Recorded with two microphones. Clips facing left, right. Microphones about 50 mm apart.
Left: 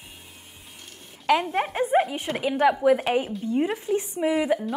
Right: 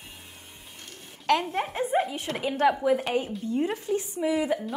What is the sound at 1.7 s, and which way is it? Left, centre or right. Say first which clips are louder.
Speech: left 5 dB; left.